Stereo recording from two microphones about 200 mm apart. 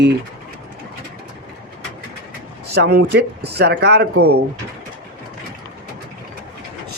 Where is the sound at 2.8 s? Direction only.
55° right (ahead or behind).